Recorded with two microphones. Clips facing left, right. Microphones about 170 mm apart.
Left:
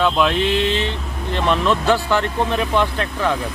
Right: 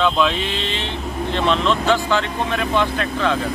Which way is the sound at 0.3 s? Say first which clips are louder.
Left 6 dB; 55° left (ahead or behind).